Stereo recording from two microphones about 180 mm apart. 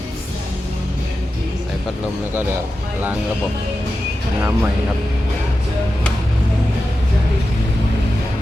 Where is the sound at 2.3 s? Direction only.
10° right (ahead or behind).